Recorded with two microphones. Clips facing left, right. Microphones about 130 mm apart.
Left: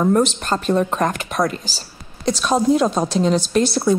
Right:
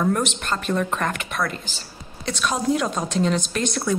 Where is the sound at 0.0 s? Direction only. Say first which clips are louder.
Left 6 dB; 35° left (ahead or behind).